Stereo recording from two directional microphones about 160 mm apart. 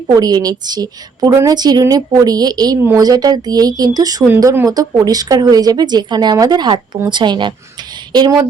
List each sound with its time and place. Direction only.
0.1 s a woman's voice: 25° right (ahead or behind)